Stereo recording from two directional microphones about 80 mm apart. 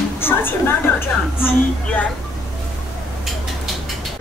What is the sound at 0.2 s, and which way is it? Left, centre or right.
Speech, left.